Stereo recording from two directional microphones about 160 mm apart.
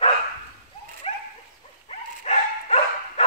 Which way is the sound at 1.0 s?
35° left (ahead or behind).